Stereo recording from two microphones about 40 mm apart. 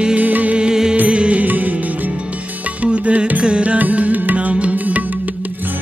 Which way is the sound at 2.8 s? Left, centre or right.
Right.